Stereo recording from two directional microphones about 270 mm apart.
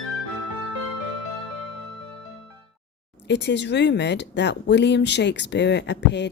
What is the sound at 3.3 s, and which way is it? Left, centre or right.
Speech, left.